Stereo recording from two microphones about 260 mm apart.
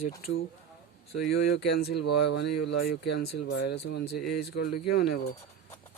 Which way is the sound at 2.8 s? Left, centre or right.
Left.